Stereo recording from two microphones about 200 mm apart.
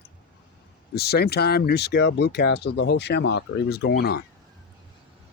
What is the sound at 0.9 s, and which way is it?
Speech, 55° left (ahead or behind).